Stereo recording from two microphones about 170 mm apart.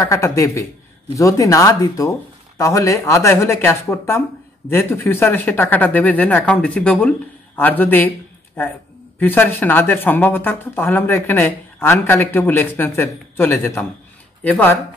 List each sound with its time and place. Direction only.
0.0 s speech: 20° left (ahead or behind)